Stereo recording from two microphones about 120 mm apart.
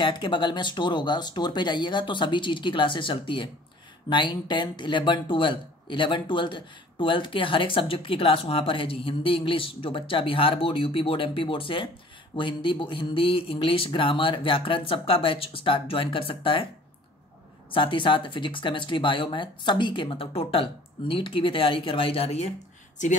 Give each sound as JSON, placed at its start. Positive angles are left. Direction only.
{"t": 0.0, "sound": "speech", "side_deg": 45}
{"t": 17.7, "sound": "speech", "side_deg": 45}
{"t": 23.0, "sound": "speech", "side_deg": 90}